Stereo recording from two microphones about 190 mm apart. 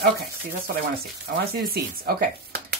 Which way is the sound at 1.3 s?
55° right (ahead or behind).